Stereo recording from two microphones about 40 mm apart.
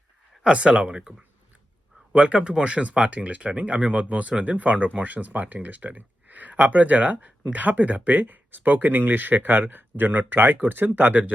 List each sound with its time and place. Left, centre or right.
0.4 s speech: right
2.1 s speech: right